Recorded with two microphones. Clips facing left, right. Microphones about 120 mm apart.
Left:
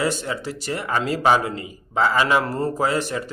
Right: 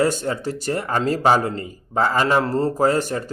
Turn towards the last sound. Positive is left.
turn(degrees=-45)  # may be behind; listen again after turning